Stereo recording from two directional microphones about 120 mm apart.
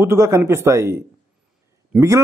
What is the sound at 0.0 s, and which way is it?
A man's voice, 25° right (ahead or behind).